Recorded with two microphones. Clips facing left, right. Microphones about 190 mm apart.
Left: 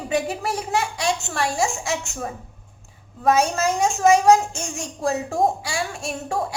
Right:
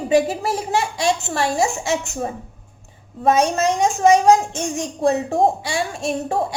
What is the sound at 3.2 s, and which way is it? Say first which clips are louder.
A woman's voice: right 2 dB; centre (ahead or behind).